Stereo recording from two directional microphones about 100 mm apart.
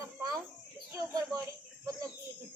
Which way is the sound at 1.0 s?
35° right (ahead or behind).